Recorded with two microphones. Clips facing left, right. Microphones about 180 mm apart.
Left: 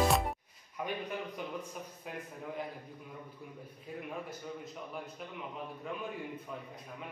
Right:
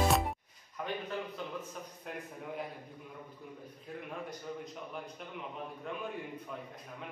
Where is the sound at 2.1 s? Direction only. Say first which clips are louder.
Even; 5° left (ahead or behind).